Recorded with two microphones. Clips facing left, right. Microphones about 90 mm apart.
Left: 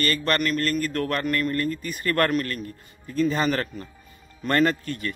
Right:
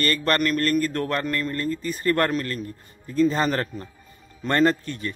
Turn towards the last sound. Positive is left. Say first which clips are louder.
# right 2 dB
turn(degrees=-30)  # may be behind; listen again after turning